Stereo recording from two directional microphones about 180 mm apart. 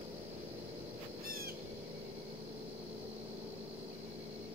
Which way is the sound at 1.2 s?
55° right (ahead or behind).